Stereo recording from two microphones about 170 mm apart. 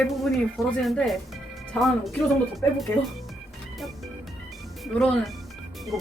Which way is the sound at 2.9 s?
15° left (ahead or behind).